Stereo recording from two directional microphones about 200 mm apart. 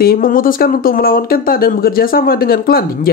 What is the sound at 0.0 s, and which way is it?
Speech, 45° left (ahead or behind).